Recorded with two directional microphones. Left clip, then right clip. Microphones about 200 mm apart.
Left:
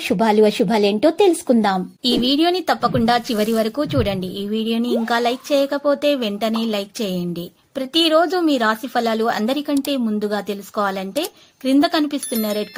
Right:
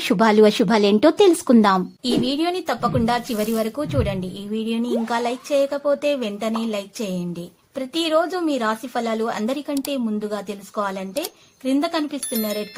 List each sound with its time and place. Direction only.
0.1 s a woman's voice: 5° right (ahead or behind)
2.1 s a woman's voice: 20° left (ahead or behind)
10.4 s a woman's voice: 30° left (ahead or behind)